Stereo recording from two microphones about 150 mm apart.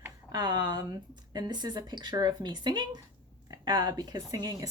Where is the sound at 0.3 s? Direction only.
25° right (ahead or behind).